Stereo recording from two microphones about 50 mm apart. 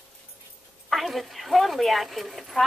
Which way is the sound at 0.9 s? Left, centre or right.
Centre.